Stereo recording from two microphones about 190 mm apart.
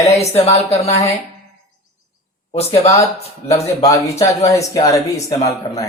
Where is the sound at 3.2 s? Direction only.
35° left (ahead or behind).